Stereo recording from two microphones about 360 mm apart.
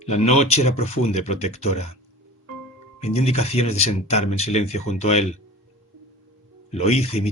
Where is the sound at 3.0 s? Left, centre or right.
Centre.